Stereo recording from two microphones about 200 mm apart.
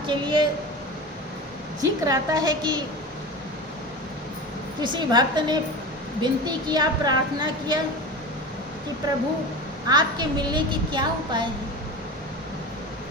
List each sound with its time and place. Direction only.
0.1 s a woman's voice: 25° right (ahead or behind)
1.8 s a woman's voice: 20° right (ahead or behind)
4.8 s a woman's voice: 20° right (ahead or behind)
9.8 s a woman's voice: 20° right (ahead or behind)